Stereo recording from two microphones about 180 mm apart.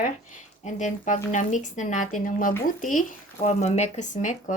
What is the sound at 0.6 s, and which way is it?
Speech, 40° left (ahead or behind).